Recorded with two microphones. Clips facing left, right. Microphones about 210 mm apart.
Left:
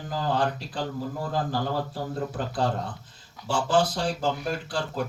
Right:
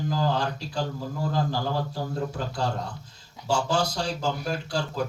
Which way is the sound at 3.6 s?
Centre (ahead or behind).